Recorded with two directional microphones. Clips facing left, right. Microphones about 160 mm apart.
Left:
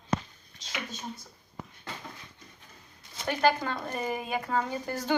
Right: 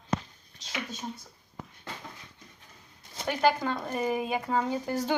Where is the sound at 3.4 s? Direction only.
15° right (ahead or behind).